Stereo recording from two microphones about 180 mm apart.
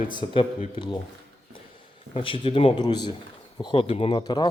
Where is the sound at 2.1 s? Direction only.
30° left (ahead or behind).